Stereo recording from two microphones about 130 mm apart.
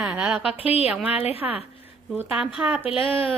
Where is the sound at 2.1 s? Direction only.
10° right (ahead or behind).